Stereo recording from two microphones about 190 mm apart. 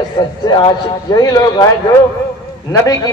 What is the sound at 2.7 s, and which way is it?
Speech, 20° left (ahead or behind).